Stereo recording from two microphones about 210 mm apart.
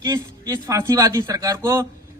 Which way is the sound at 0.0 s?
15° right (ahead or behind).